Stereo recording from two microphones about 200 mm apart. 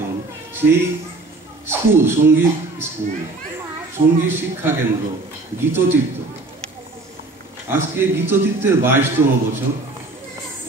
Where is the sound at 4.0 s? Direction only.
40° right (ahead or behind).